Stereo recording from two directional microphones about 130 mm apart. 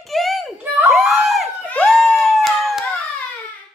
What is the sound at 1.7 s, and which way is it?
Howl, centre (ahead or behind).